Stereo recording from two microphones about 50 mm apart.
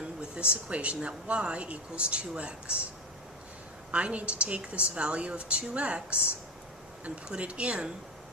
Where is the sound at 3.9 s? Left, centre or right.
Right.